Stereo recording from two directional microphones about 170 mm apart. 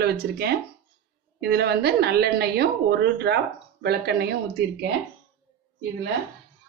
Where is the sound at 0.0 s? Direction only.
70° right (ahead or behind).